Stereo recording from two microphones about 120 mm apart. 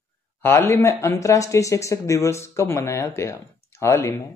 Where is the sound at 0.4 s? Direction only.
20° left (ahead or behind).